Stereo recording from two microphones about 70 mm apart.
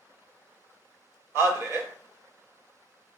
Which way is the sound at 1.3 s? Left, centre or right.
Right.